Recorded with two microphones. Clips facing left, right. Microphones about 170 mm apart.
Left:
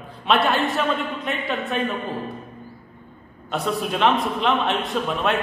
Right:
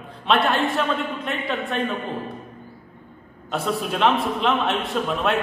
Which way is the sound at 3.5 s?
Centre (ahead or behind).